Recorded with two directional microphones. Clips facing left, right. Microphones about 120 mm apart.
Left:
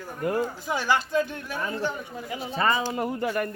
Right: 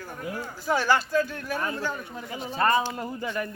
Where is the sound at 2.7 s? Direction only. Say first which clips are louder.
Even; 85° left.